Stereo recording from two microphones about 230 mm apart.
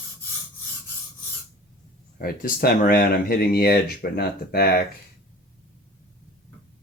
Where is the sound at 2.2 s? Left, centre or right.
Left.